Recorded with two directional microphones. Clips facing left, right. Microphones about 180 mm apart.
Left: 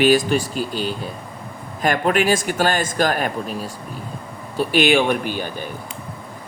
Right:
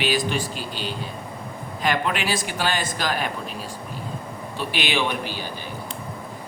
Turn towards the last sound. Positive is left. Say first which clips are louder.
# left 6 dB
turn(degrees=50)  # may be behind; listen again after turning